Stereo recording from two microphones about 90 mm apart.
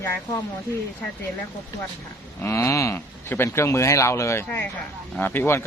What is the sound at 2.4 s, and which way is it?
Speech, 35° left (ahead or behind).